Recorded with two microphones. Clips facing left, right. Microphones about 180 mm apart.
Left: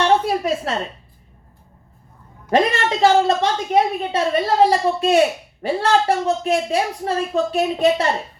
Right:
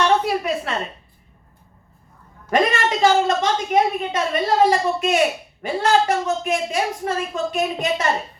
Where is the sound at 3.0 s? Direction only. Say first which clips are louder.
Left 3 dB; 30° left (ahead or behind).